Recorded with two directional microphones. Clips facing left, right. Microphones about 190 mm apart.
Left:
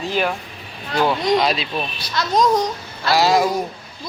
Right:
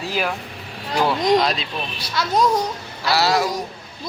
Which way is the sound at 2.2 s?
10° right (ahead or behind).